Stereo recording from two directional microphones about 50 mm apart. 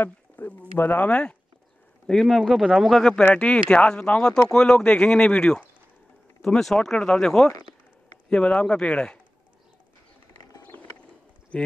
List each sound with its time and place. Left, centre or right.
0.0 s a sound: left
0.7 s speech: left
2.2 s speech: centre
3.3 s speech: left
6.6 s speech: centre
11.5 s speech: left